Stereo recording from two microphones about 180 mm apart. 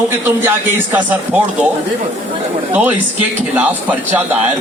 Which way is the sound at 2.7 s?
10° right (ahead or behind).